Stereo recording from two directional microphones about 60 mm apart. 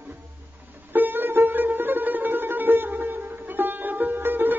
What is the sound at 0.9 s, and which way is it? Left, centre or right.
Music, right.